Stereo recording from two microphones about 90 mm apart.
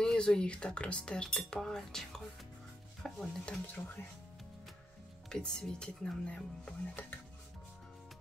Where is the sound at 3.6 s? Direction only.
15° left (ahead or behind).